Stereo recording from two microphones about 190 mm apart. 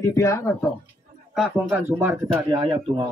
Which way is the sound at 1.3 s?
10° right (ahead or behind).